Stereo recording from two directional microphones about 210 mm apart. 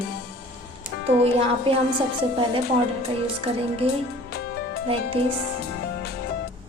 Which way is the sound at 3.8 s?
30° right (ahead or behind).